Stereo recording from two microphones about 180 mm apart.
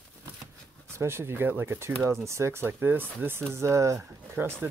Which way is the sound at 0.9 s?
15° right (ahead or behind).